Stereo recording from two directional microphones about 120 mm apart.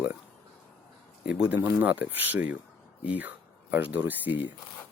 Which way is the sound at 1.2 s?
10° right (ahead or behind).